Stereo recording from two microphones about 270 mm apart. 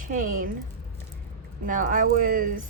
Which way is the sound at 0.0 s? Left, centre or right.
Right.